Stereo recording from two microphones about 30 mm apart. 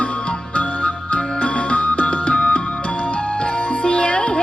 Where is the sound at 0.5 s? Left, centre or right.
Left.